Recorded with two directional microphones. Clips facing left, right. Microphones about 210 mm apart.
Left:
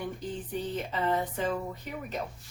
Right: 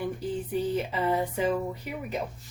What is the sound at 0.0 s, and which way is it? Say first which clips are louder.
Speech: right 5 dB; 10° right (ahead or behind).